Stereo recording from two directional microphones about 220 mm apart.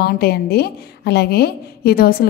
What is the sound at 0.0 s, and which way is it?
A woman's voice, 45° left (ahead or behind).